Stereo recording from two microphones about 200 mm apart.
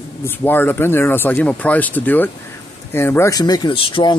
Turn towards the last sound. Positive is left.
turn(degrees=25)  # may be behind; listen again after turning